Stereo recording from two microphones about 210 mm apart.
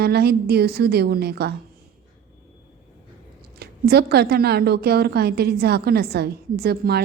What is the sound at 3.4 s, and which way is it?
A woman's voice, 50° right (ahead or behind).